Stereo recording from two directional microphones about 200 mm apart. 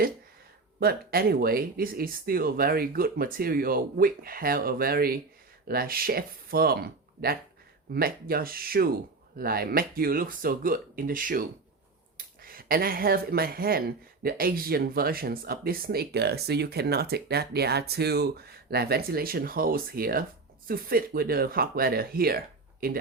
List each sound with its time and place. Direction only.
0.8 s speech: 50° right (ahead or behind)